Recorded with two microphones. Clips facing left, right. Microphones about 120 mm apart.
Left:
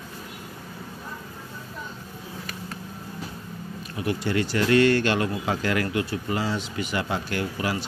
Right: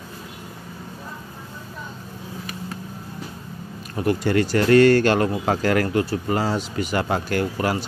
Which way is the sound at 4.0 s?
45° right (ahead or behind).